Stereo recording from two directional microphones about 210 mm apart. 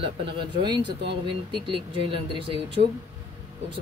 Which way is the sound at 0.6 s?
20° right (ahead or behind).